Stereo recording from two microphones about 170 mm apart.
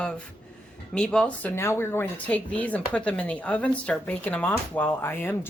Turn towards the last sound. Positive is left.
turn(degrees=10)  # may be behind; listen again after turning